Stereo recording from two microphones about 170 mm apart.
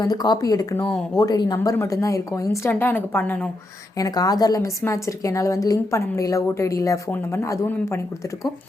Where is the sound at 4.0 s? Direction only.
20° left (ahead or behind).